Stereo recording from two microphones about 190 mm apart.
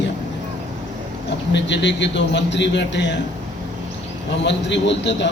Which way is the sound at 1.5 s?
70° left (ahead or behind).